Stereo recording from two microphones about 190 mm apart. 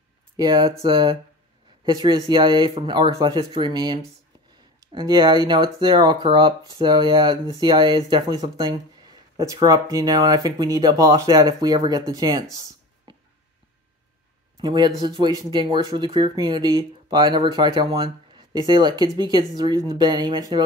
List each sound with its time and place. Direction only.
0.4 s speech: 20° right (ahead or behind)
13.1 s a sound: 25° right (ahead or behind)
14.6 s speech: 20° right (ahead or behind)